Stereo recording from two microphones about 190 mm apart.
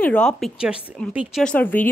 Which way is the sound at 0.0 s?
5° left (ahead or behind).